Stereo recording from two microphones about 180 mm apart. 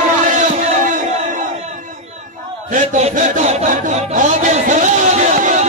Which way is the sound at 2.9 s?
40° right (ahead or behind).